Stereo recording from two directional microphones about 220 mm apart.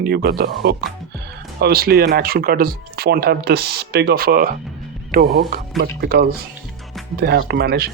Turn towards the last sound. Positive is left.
turn(degrees=-45)  # may be behind; listen again after turning